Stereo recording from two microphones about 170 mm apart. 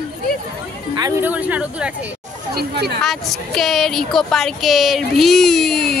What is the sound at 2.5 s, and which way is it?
Speech, 70° right (ahead or behind).